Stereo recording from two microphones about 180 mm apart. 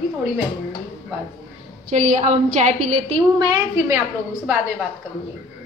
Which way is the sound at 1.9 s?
40° right (ahead or behind).